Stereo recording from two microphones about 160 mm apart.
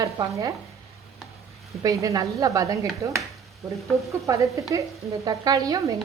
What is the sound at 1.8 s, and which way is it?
Frying, 20° right (ahead or behind).